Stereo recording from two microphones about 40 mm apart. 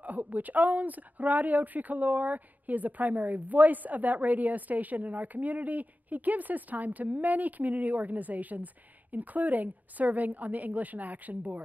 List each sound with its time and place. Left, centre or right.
0.0 s speech: right